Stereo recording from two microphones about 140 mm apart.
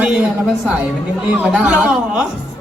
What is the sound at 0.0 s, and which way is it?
A woman's voice, 5° right (ahead or behind).